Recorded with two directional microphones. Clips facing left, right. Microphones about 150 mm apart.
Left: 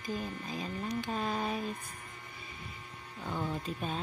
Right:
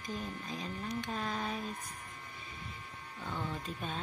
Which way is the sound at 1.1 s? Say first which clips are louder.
Left 4 dB; 15° left (ahead or behind).